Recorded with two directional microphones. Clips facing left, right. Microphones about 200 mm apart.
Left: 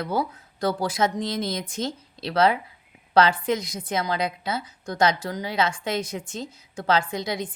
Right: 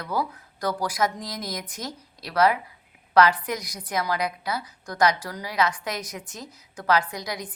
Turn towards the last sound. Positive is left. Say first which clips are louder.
# left 5 dB
turn(degrees=25)  # may be behind; listen again after turning